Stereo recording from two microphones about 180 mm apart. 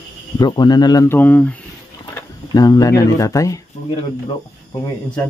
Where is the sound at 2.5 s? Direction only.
20° left (ahead or behind).